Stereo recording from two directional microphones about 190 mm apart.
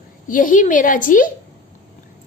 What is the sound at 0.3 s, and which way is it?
A woman's voice, 45° left (ahead or behind).